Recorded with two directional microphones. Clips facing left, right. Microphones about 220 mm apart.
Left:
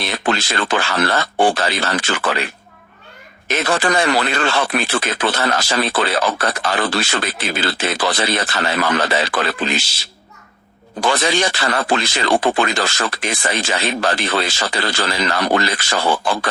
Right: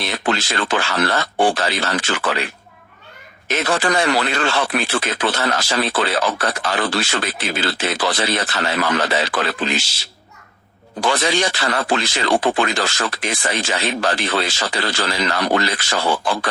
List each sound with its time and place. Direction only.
0.0 s speech: 55° left (ahead or behind)
3.5 s speech: 55° left (ahead or behind)
11.0 s speech: 55° left (ahead or behind)